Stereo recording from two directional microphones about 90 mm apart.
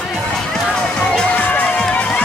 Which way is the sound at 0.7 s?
10° left (ahead or behind).